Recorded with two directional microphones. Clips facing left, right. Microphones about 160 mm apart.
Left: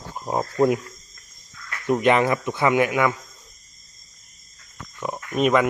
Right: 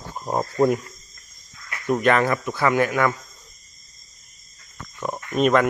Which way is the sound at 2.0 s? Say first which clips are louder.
Left 1 dB; 15° left (ahead or behind).